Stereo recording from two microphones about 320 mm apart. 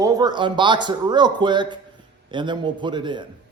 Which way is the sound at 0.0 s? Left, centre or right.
Centre.